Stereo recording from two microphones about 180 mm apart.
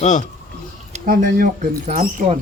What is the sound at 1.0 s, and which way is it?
Speech, 50° right (ahead or behind).